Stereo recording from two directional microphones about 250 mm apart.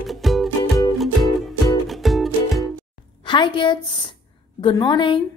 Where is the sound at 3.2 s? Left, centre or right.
Centre.